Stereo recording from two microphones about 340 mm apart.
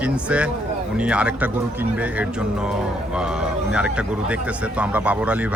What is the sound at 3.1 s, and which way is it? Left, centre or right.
Speech, centre.